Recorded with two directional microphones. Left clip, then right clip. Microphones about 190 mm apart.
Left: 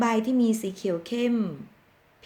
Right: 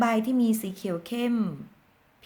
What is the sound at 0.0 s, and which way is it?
A woman's voice, 20° right (ahead or behind).